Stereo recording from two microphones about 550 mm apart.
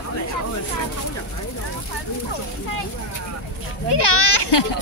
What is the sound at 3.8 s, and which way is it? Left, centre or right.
Speech, left.